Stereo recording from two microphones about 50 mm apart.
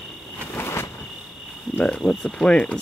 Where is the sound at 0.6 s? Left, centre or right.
Left.